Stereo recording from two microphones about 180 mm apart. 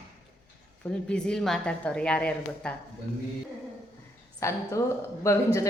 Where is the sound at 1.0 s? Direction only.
5° left (ahead or behind).